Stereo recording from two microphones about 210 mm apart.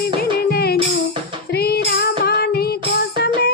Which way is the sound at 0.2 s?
45° left (ahead or behind).